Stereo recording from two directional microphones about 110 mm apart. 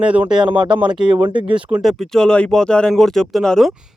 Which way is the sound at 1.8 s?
5° left (ahead or behind).